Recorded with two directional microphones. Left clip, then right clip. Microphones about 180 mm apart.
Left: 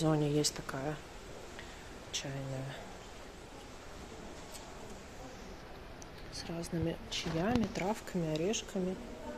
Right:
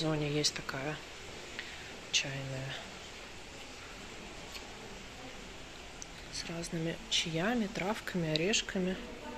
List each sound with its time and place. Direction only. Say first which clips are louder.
0.0 s speech: left 1 dB; 35° left (ahead or behind)
0.7 s speech: right 1 dB; 15° left (ahead or behind)
2.1 s speech: right 7 dB; 20° left (ahead or behind)
6.3 s speech: right 1 dB; 15° left (ahead or behind)